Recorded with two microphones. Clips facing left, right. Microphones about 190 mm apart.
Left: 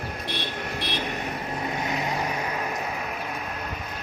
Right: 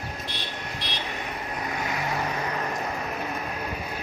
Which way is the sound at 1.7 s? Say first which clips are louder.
Even; 20° left (ahead or behind).